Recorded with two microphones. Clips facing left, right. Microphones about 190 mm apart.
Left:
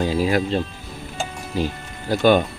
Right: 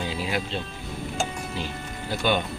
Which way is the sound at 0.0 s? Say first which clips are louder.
Left 9 dB; 45° left (ahead or behind).